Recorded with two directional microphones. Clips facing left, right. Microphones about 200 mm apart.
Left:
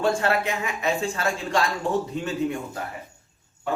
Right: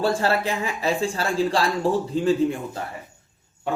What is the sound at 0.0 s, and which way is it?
Speech, 35° right (ahead or behind).